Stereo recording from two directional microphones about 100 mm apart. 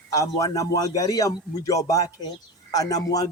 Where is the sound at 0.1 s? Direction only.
35° left (ahead or behind).